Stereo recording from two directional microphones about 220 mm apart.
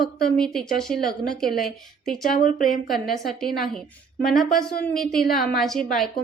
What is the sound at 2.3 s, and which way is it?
Speech, 40° left (ahead or behind).